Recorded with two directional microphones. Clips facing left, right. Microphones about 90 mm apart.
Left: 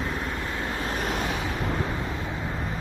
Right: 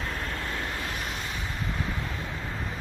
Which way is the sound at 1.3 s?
70° left (ahead or behind).